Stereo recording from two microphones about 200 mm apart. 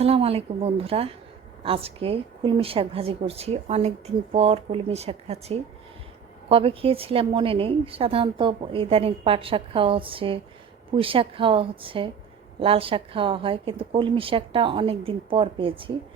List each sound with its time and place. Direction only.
0.0 s a woman's voice: 30° right (ahead or behind)